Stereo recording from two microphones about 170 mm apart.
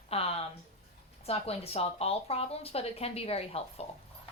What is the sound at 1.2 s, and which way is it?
Speech, 35° left (ahead or behind).